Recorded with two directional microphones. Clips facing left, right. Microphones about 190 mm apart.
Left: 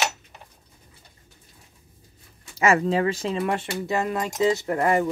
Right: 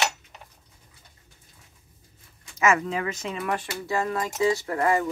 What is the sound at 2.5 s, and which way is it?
Speech, 30° left (ahead or behind).